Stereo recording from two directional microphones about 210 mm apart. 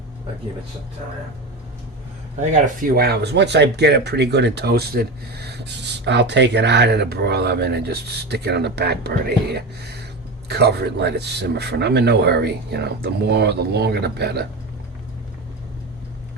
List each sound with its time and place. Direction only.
2.8 s speech: 45° right (ahead or behind)